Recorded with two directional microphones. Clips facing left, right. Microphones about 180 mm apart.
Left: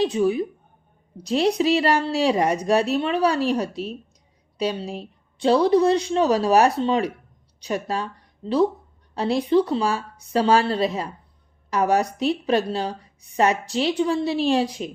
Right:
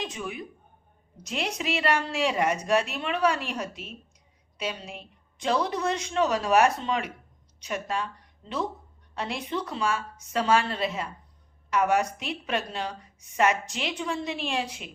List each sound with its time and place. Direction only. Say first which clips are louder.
0.0 s a woman's voice: left 14 dB; 35° left (ahead or behind)